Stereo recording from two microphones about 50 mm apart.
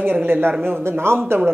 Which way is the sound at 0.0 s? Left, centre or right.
Right.